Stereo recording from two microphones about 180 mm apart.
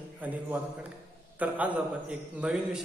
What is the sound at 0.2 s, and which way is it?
Speech, 10° right (ahead or behind).